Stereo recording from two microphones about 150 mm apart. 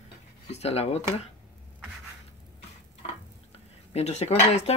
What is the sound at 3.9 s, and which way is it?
Speech, 45° left (ahead or behind).